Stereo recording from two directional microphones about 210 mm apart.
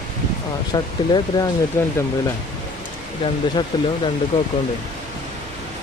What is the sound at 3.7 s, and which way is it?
Speech, 20° left (ahead or behind).